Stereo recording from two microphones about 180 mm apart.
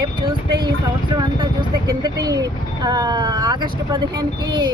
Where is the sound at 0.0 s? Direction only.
25° right (ahead or behind).